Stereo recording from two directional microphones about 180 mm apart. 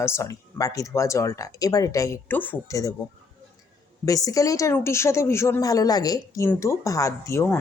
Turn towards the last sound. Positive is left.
turn(degrees=15)  # may be behind; listen again after turning